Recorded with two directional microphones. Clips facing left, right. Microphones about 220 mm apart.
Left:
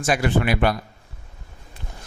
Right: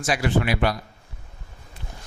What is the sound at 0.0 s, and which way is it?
Speech, 50° left (ahead or behind).